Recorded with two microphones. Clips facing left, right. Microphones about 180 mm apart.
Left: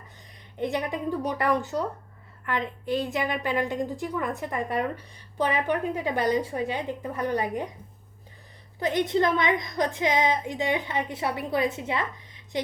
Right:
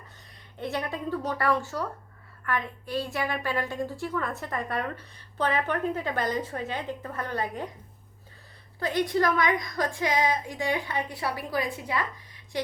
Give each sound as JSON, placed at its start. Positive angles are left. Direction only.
{"t": 0.5, "sound": "a woman's voice", "side_deg": 15}
{"t": 8.8, "sound": "a woman's voice", "side_deg": 20}